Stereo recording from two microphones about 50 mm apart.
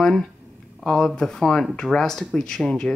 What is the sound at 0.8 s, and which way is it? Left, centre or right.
Speech, centre.